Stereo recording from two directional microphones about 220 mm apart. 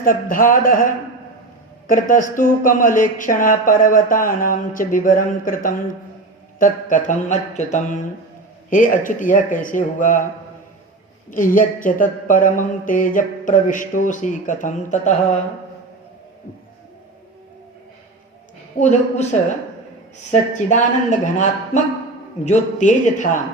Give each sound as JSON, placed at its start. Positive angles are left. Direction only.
{"t": 0.0, "sound": "speech", "side_deg": 40}
{"t": 1.9, "sound": "speech", "side_deg": 40}
{"t": 11.3, "sound": "speech", "side_deg": 40}
{"t": 18.8, "sound": "speech", "side_deg": 30}